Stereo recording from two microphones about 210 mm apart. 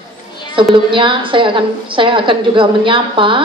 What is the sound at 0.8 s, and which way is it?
A woman's voice, 25° right (ahead or behind).